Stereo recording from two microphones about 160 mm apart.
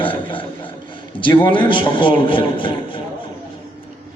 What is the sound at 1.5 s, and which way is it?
A man's voice, 30° left (ahead or behind).